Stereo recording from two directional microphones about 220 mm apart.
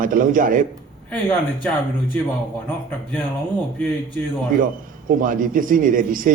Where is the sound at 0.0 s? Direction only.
40° right (ahead or behind).